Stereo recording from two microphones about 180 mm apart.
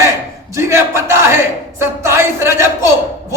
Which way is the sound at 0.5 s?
15° right (ahead or behind).